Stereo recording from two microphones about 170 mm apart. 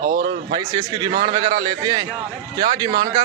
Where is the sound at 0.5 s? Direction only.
25° right (ahead or behind).